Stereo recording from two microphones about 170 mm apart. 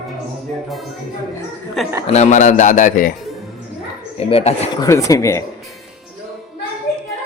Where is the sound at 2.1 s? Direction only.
45° left (ahead or behind).